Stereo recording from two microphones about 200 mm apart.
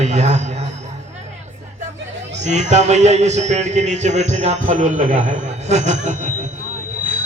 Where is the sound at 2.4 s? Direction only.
35° right (ahead or behind).